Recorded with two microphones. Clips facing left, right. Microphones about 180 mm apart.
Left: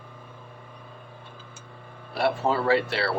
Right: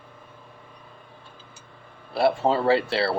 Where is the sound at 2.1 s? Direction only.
30° right (ahead or behind).